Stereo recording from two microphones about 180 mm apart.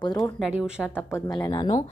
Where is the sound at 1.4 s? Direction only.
25° left (ahead or behind).